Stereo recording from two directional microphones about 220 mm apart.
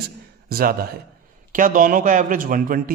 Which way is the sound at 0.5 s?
40° right (ahead or behind).